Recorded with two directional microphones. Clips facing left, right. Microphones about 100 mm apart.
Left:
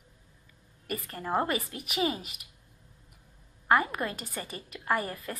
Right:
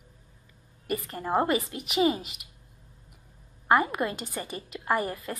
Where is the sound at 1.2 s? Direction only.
20° right (ahead or behind).